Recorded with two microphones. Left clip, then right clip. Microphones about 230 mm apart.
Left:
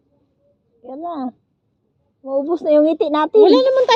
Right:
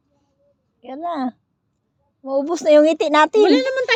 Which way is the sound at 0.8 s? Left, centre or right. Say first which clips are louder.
Right 2 dB; right.